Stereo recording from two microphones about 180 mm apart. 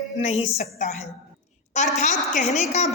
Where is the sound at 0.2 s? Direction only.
35° left (ahead or behind).